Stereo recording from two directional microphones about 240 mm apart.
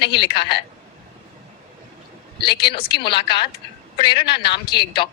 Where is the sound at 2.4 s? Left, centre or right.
Left.